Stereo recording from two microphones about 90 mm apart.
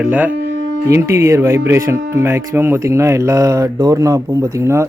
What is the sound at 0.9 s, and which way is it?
Speech, 30° right (ahead or behind).